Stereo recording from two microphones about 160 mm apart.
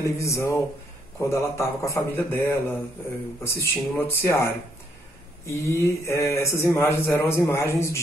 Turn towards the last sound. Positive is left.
turn(degrees=20)  # may be behind; listen again after turning